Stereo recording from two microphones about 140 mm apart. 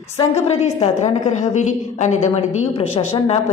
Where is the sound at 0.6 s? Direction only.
55° left (ahead or behind).